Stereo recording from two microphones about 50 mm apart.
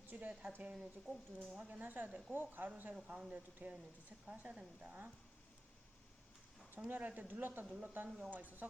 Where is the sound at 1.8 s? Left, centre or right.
Right.